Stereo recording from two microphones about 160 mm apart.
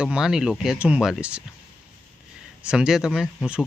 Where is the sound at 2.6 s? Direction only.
5° right (ahead or behind).